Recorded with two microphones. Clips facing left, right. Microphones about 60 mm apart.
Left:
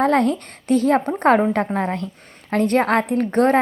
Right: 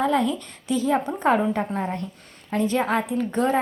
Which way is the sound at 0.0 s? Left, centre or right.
Left.